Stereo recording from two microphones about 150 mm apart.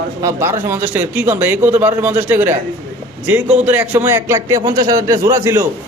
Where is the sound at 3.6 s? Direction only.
10° right (ahead or behind).